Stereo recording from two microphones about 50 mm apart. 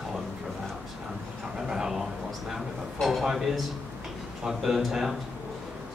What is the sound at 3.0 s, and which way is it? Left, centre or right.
A man's voice, centre.